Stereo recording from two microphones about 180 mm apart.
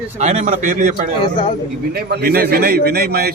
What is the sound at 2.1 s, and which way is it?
A man's voice, 60° right (ahead or behind).